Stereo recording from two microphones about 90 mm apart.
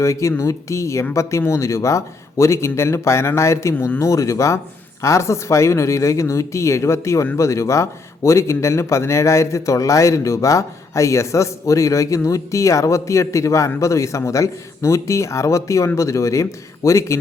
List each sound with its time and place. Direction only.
0.0 s speech: 35° left (ahead or behind)
4.1 s speech: 35° left (ahead or behind)